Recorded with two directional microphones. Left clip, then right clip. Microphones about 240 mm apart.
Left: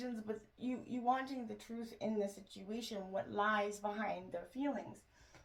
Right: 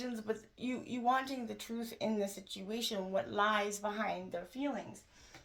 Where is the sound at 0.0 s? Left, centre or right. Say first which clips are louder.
Right 5 dB; right.